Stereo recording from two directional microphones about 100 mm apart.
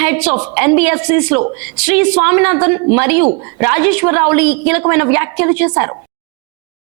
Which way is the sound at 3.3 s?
35° right (ahead or behind).